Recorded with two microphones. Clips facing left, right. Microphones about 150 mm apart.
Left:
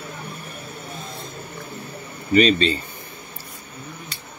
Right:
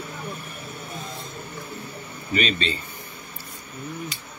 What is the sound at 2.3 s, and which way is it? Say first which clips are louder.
Speech: left 8 dB; 35° left (ahead or behind).